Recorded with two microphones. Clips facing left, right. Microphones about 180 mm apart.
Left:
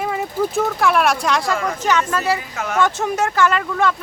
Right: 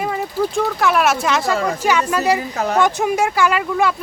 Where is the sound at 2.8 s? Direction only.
15° right (ahead or behind).